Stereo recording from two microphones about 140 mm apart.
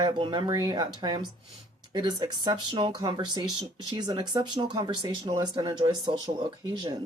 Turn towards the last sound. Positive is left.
turn(degrees=-30)  # may be behind; listen again after turning